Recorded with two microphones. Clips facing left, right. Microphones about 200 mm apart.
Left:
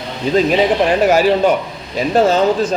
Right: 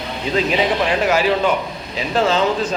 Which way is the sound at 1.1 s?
45° left (ahead or behind).